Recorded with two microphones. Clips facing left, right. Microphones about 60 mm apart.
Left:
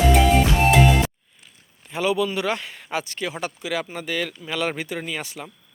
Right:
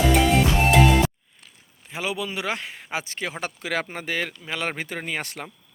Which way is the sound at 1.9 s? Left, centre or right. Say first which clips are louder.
Left 6 dB; centre.